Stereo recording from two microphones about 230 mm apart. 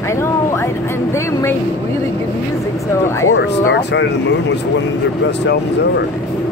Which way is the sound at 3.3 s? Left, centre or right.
Left.